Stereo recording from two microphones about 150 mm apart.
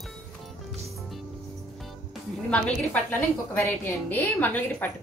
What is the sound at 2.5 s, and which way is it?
A woman's voice, 10° left (ahead or behind).